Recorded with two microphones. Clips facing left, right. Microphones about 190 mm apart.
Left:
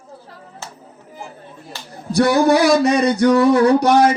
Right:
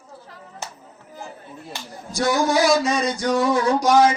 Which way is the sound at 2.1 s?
65° left (ahead or behind).